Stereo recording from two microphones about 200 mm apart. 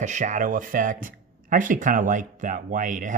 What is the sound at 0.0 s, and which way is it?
Speech, 35° right (ahead or behind).